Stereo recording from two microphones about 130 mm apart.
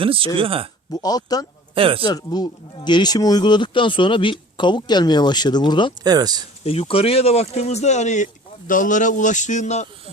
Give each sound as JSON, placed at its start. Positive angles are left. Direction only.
{"t": 0.0, "sound": "speech", "side_deg": -45}
{"t": 0.9, "sound": "speech", "side_deg": 30}
{"t": 1.7, "sound": "speech", "side_deg": -45}
{"t": 2.0, "sound": "speech", "side_deg": 30}
{"t": 6.0, "sound": "speech", "side_deg": -30}
{"t": 6.7, "sound": "speech", "side_deg": 45}